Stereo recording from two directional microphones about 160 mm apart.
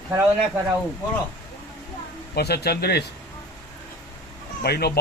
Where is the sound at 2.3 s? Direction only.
90° left.